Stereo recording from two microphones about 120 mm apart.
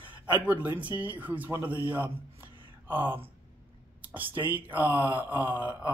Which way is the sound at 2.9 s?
15° right (ahead or behind).